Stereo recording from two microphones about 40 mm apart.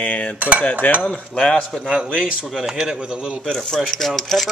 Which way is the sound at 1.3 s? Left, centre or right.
Left.